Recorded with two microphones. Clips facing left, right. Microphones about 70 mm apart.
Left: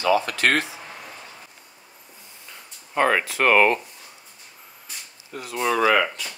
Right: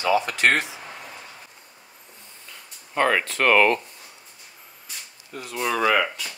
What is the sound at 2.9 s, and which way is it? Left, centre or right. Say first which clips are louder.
Speech: left 1 dB; centre.